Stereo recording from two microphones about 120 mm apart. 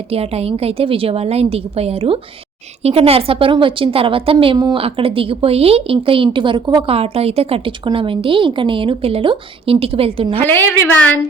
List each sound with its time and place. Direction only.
0.1 s a woman's voice: 55° right (ahead or behind)
4.5 s speech: 35° right (ahead or behind)
4.8 s speech: 50° right (ahead or behind)
10.4 s a woman's voice: 15° left (ahead or behind)